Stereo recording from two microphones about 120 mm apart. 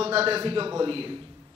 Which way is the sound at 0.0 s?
55° right (ahead or behind).